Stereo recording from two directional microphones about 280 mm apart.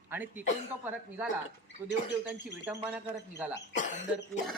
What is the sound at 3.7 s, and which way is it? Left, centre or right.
Cough, left.